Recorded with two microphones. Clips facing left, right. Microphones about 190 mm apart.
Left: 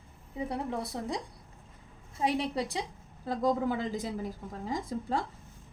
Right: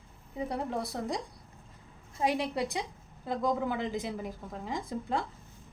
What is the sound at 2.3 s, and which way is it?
A woman's voice, 30° left (ahead or behind).